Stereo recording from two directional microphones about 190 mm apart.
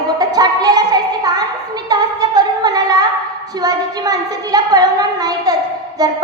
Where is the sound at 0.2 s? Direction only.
20° right (ahead or behind).